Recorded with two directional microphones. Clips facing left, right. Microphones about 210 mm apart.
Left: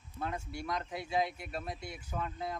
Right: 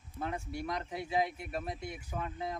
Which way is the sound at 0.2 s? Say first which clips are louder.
Right 1 dB; 20° right (ahead or behind).